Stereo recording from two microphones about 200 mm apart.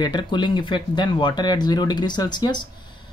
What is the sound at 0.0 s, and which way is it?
Speech, 20° left (ahead or behind).